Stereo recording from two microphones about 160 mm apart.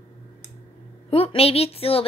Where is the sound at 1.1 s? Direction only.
35° left (ahead or behind).